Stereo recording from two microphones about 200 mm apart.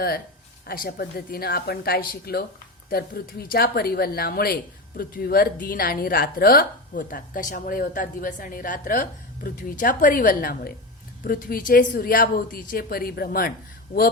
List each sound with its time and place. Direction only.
0.7 s speech: 50° left (ahead or behind)